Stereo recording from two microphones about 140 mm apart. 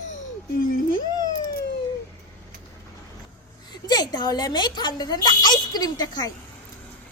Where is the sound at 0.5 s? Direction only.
90° left.